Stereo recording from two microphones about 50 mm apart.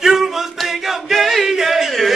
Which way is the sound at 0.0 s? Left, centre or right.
Centre.